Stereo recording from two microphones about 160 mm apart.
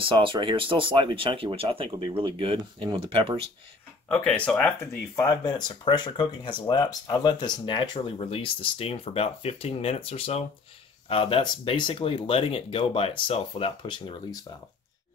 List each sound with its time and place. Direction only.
0.0 s speech: 35° right (ahead or behind)
4.1 s speech: 5° left (ahead or behind)
5.4 s speech: 25° left (ahead or behind)